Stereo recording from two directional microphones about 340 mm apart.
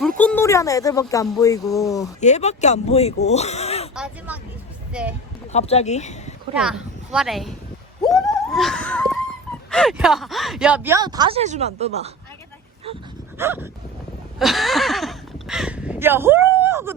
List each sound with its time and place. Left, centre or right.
0.2 s speech: centre
3.9 s speech: centre
5.5 s speech: centre
6.6 s speech: centre
8.0 s a sound: centre
9.6 s speech: centre
13.4 s speech: centre
14.3 s a sound: centre